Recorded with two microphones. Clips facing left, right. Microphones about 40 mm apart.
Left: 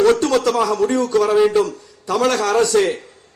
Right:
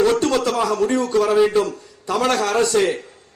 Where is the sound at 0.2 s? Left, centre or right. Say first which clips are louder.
Left 2 dB; right.